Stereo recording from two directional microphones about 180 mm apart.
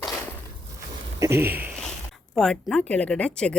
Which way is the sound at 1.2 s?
15° right (ahead or behind).